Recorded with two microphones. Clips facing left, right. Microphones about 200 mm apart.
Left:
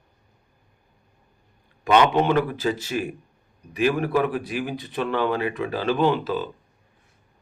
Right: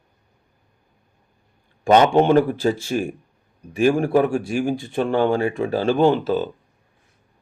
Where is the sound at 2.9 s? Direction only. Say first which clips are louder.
Right 4 dB; 45° right (ahead or behind).